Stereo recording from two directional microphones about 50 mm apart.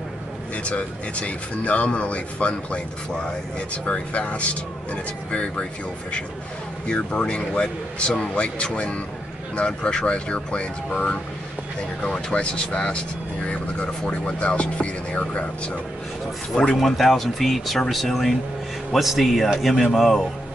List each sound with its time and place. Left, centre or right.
0.7 s speech: left
6.9 s speech: left
16.8 s speech: centre